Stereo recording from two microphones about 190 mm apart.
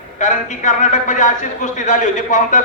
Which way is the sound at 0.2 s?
40° left (ahead or behind).